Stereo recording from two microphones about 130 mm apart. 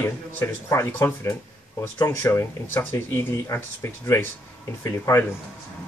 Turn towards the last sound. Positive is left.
turn(degrees=20)  # may be behind; listen again after turning